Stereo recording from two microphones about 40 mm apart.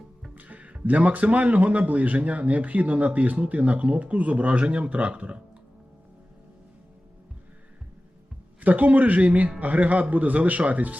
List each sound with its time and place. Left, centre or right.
0.3 s speech: right
8.6 s speech: right